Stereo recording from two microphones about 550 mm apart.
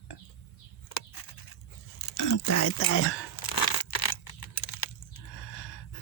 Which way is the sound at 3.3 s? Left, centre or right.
Left.